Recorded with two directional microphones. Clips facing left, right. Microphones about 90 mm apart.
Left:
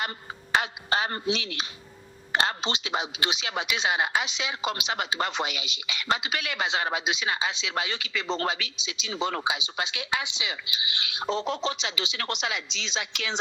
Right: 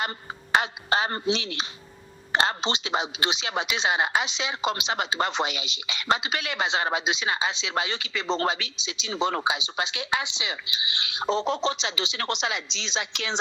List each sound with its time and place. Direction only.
0.5 s speech: 30° right (ahead or behind)